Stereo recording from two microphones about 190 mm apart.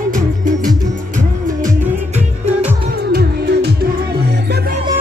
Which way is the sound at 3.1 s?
60° right (ahead or behind).